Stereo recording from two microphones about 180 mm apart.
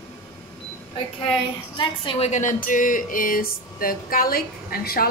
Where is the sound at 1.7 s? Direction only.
30° left (ahead or behind).